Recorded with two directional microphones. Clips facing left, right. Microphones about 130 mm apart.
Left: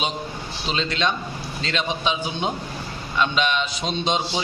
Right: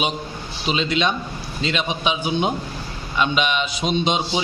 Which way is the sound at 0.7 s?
10° right (ahead or behind).